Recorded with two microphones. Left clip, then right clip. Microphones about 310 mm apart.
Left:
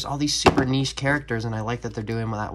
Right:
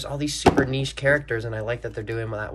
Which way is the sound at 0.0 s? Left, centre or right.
Centre.